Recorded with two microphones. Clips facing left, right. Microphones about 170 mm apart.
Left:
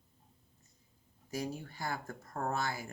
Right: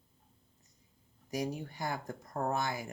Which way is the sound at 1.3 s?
15° right (ahead or behind).